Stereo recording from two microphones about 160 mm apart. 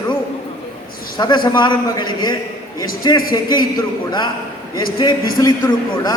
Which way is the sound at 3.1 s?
25° left (ahead or behind).